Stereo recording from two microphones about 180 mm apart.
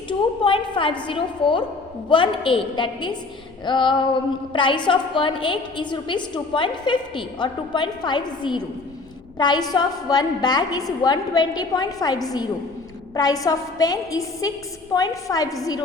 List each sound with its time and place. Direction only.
0.1 s a woman's voice: 25° left (ahead or behind)